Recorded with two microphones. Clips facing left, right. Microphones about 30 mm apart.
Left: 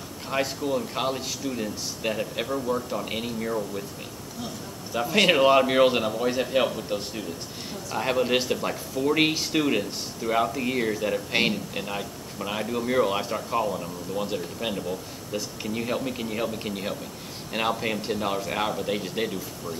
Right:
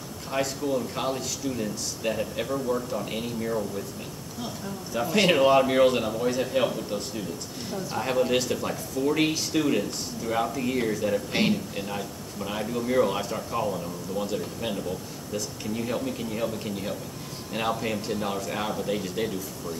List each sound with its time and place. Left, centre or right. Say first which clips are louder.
0.3 s a man's voice: left 1 dB; centre
4.9 s a man's voice: left 1 dB; centre